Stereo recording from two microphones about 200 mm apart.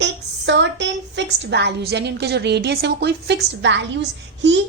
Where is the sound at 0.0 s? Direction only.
60° right (ahead or behind).